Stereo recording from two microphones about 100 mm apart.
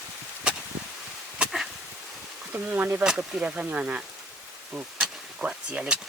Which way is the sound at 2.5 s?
15° right (ahead or behind).